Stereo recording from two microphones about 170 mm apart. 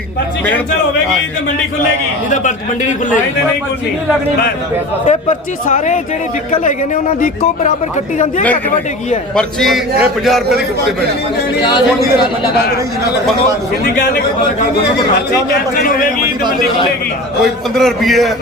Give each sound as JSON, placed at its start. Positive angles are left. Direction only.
{"t": 2.3, "sound": "speech", "side_deg": 45}
{"t": 5.0, "sound": "speech", "side_deg": 45}
{"t": 9.3, "sound": "a man's voice", "side_deg": 5}
{"t": 17.4, "sound": "a man's voice", "side_deg": 0}